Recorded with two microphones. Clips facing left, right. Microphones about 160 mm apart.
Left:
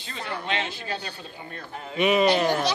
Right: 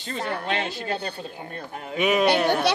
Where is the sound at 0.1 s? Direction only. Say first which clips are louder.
Right 3 dB; 50° right (ahead or behind).